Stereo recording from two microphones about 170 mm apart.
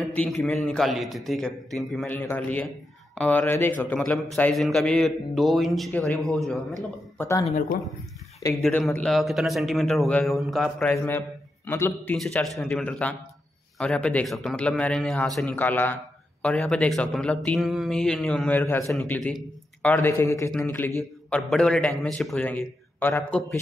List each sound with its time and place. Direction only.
0.1 s a man's voice: 5° left (ahead or behind)
7.2 s speech: 15° left (ahead or behind)
7.4 s speech: 50° left (ahead or behind)
8.6 s a man's voice: centre (ahead or behind)
12.2 s a man's voice: centre (ahead or behind)